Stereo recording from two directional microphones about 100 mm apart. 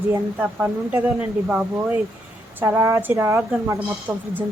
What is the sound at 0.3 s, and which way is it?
Speech, 15° right (ahead or behind).